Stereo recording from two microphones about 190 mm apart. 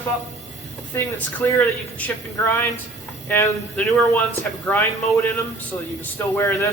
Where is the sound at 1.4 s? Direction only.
10° left (ahead or behind).